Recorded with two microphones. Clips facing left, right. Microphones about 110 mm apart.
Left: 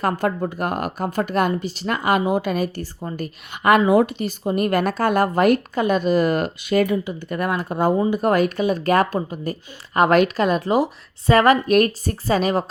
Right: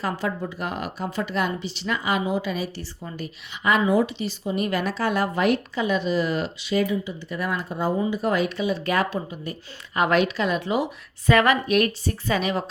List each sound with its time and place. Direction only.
0.0 s a woman's voice: 50° left (ahead or behind)
3.0 s a woman's voice: 35° left (ahead or behind)
3.6 s a woman's voice: 60° left (ahead or behind); by 12.6 s 40° left (ahead or behind)